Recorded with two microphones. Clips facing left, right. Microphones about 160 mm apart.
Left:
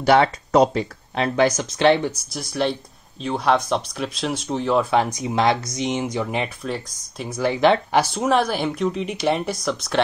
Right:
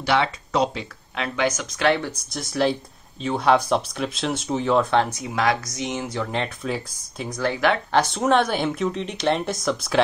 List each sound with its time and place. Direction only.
0.0 s speech: 45° left (ahead or behind); by 2.0 s 25° left (ahead or behind)
2.3 s speech: centre (ahead or behind)
5.1 s speech: 25° left (ahead or behind)
6.6 s speech: centre (ahead or behind)
7.6 s speech: 25° left (ahead or behind)
8.1 s speech: centre (ahead or behind)